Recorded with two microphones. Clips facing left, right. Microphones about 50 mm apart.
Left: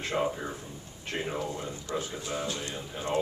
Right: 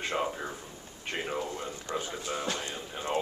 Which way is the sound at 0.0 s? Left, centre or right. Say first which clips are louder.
Left 2 dB; centre.